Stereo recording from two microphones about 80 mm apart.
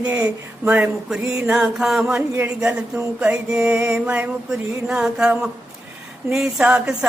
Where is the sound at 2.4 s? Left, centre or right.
Centre.